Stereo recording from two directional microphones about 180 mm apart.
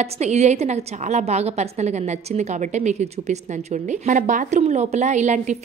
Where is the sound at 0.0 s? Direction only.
35° right (ahead or behind).